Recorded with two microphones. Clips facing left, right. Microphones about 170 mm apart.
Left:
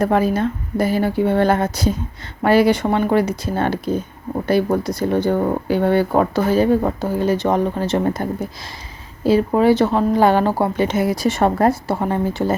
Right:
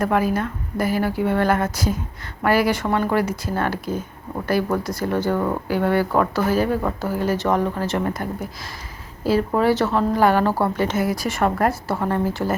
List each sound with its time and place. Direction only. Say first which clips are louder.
0.0 s speech: left 4 dB; 25° left (ahead or behind)